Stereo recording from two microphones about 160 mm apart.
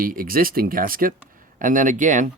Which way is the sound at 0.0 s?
60° right (ahead or behind).